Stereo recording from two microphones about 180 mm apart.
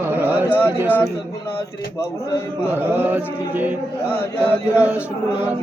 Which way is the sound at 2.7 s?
10° right (ahead or behind).